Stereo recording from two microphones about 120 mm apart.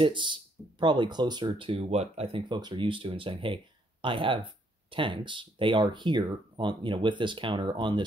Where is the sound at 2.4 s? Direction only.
40° right (ahead or behind).